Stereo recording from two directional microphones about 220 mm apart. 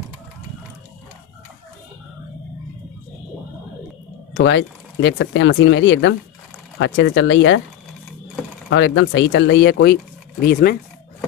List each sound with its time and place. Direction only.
4.3 s speech: 55° left (ahead or behind)
8.6 s speech: 55° left (ahead or behind)